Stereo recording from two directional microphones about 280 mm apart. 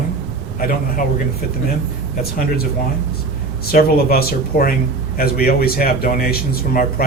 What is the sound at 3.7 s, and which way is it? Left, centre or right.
A man's voice, left.